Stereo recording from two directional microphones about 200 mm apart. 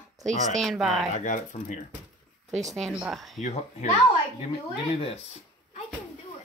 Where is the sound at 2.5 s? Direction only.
Centre (ahead or behind).